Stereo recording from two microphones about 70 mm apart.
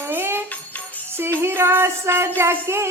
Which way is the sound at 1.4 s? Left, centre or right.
Right.